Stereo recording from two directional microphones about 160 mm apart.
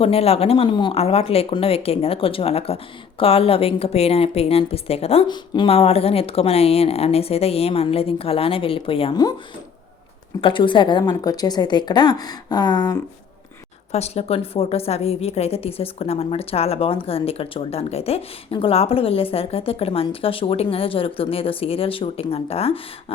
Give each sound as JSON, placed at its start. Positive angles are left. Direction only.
{"t": 0.0, "sound": "speech", "side_deg": 40}
{"t": 10.4, "sound": "a woman's voice", "side_deg": 30}
{"t": 13.9, "sound": "speech", "side_deg": 40}